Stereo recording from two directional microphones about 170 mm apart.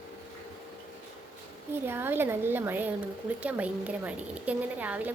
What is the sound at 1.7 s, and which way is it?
A woman's voice, 15° right (ahead or behind).